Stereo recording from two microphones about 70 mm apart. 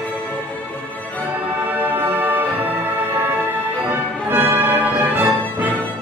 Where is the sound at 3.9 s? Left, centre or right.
Right.